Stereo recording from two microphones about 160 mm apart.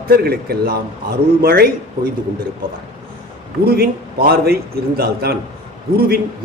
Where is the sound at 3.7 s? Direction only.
75° right (ahead or behind).